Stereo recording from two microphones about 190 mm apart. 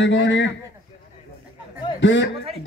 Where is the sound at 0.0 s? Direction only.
70° left (ahead or behind).